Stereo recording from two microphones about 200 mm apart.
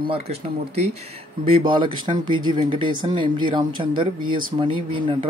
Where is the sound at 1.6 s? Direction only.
25° right (ahead or behind).